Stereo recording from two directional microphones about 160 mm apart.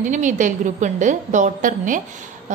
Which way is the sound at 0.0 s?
50° right (ahead or behind).